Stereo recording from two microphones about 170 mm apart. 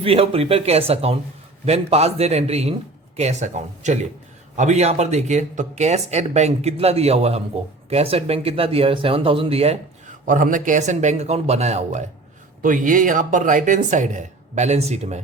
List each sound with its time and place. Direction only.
0.0 s speech: 35° right (ahead or behind)
10.2 s speech: 50° right (ahead or behind)